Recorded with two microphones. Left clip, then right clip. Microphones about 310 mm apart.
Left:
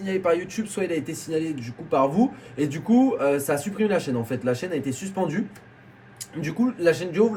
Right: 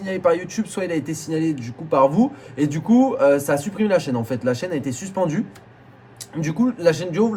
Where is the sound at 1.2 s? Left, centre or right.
Centre.